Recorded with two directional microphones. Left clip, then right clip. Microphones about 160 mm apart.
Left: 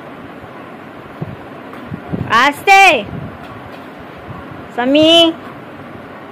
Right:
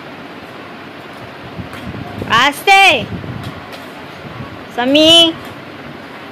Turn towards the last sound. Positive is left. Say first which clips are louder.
# right 1 dB
turn(degrees=0)  # may be behind; listen again after turning